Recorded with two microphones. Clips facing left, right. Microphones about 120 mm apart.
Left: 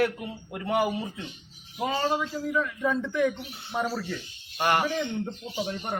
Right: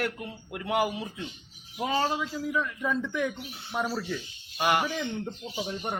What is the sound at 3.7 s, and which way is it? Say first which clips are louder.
Speech: left 2 dB; 20° left (ahead or behind).